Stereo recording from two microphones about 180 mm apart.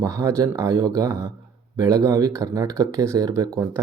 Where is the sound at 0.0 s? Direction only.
20° right (ahead or behind).